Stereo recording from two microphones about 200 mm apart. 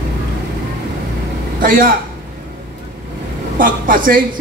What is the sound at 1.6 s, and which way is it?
Speech, 45° right (ahead or behind).